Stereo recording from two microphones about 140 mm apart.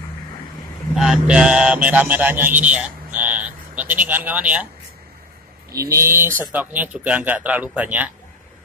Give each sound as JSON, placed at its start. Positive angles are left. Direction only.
{"t": 0.9, "sound": "speech", "side_deg": -5}
{"t": 5.7, "sound": "speech", "side_deg": -25}